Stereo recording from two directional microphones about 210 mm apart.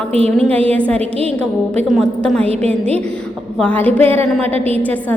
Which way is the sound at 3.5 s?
5° left (ahead or behind).